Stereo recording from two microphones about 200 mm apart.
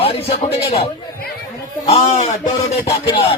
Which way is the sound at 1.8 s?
30° left (ahead or behind).